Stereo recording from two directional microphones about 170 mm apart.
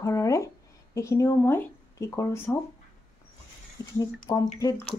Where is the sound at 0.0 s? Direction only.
20° left (ahead or behind).